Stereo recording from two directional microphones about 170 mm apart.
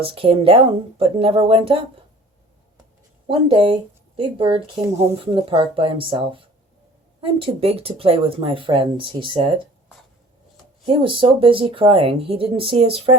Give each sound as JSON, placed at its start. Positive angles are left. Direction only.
{"t": 0.0, "sound": "speech", "side_deg": -35}
{"t": 3.2, "sound": "speech", "side_deg": -30}
{"t": 10.8, "sound": "speech", "side_deg": -30}